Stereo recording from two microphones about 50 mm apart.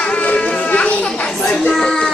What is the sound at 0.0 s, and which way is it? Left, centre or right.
Music, left.